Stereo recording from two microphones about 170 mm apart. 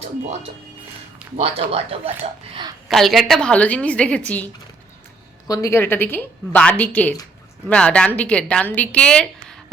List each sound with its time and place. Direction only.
1.4 s speech: 35° right (ahead or behind)
2.9 s a woman's voice: centre (ahead or behind)
5.5 s a woman's voice: 20° left (ahead or behind)